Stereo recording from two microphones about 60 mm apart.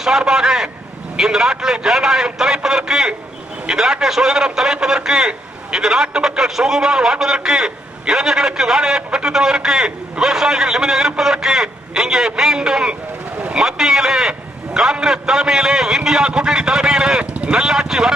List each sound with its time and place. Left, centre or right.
0.0 s a man's voice: centre
13.4 s vehicle: centre
13.7 s a man's voice: centre